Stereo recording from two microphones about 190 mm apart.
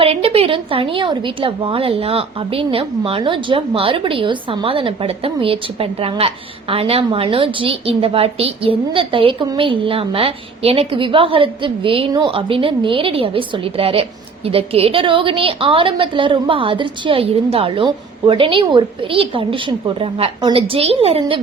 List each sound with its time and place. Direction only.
0.0 s a woman's voice: 30° right (ahead or behind)